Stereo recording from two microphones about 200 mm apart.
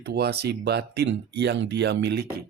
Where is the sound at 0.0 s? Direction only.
55° right (ahead or behind).